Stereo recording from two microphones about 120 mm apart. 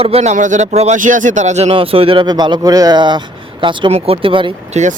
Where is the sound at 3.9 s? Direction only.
55° right (ahead or behind).